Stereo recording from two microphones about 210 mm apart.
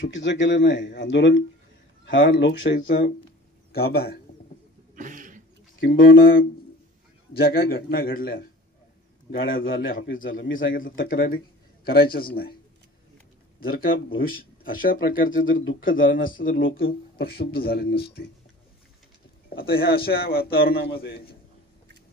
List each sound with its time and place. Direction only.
0.1 s speech: 60° left (ahead or behind)
3.7 s speech: 45° left (ahead or behind)
4.9 s a sound: 40° right (ahead or behind)
6.1 s speech: 45° left (ahead or behind)
9.7 s a man's voice: 70° left (ahead or behind)
11.0 s speech: 45° left (ahead or behind)
13.6 s speech: 45° left (ahead or behind)
15.3 s speech: 65° left (ahead or behind)
16.3 s speech: 40° left (ahead or behind)
19.5 s speech: 45° left (ahead or behind)